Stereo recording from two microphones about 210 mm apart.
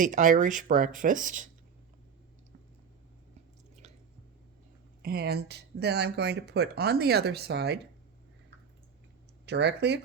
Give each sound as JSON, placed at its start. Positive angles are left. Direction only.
{"t": 0.0, "sound": "speech", "side_deg": -40}
{"t": 5.0, "sound": "speech", "side_deg": -50}
{"t": 9.5, "sound": "speech", "side_deg": -55}